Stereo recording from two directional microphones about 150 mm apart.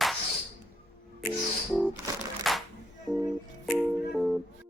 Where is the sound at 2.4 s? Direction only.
Centre (ahead or behind).